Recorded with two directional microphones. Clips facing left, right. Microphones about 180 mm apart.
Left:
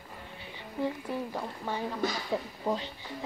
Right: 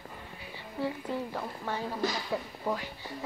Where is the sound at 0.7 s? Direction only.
15° left (ahead or behind).